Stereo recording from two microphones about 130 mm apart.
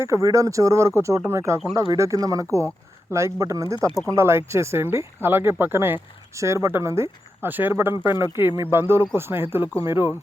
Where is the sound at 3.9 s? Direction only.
5° left (ahead or behind).